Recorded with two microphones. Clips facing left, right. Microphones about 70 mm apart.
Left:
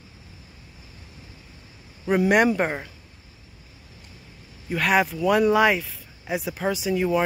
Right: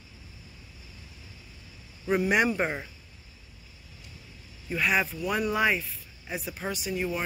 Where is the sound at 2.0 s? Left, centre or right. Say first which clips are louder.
Left 5 dB; left.